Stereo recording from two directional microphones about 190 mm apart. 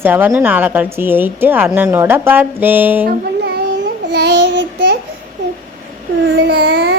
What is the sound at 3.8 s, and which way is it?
Babbling, 65° right (ahead or behind).